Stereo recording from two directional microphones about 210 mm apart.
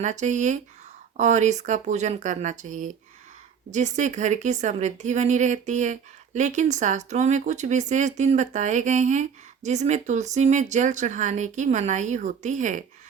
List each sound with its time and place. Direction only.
0.0 s a woman's voice: 35° right (ahead or behind)